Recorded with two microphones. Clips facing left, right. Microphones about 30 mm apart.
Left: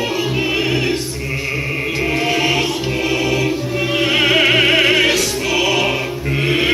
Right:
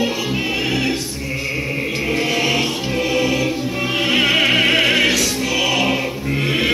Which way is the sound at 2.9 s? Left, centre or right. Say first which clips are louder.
Even; centre.